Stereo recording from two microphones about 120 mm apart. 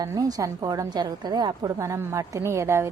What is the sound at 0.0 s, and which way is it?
A woman's voice, 30° right (ahead or behind).